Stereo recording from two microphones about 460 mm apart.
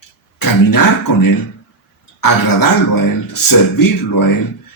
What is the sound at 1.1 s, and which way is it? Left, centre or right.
Speech, left.